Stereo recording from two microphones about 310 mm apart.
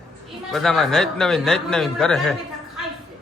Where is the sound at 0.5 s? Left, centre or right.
Centre.